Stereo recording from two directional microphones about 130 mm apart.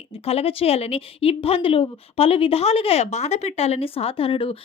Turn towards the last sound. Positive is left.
turn(degrees=45)  # may be behind; listen again after turning